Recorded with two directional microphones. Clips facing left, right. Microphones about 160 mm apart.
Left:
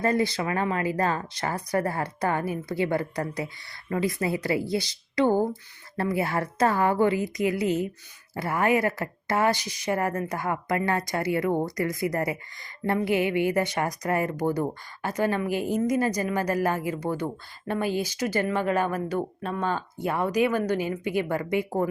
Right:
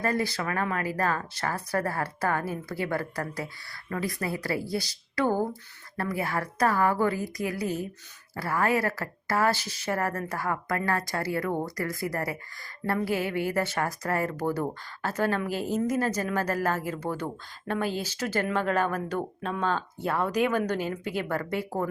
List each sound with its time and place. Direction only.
0.0 s speech: 20° left (ahead or behind)